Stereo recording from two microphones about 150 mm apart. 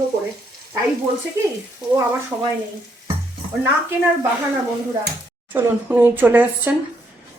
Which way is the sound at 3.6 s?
15° right (ahead or behind).